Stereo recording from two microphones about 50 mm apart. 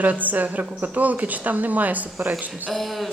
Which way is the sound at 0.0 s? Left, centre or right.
Right.